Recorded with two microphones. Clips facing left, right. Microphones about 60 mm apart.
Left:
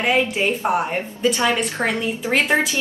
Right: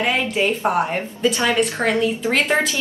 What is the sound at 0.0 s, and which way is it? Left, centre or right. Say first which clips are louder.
A woman's voice: left 1 dB; centre.